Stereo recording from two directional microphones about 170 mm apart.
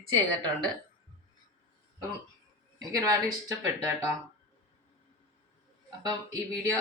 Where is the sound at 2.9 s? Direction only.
20° right (ahead or behind).